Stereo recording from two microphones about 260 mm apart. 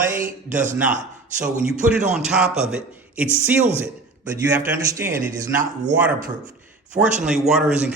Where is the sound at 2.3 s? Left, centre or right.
Centre.